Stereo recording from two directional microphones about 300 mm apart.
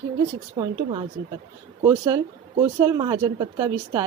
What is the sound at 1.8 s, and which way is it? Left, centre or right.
Speech, centre.